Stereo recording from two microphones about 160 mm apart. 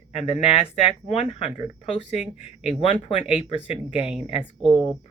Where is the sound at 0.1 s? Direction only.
40° left (ahead or behind).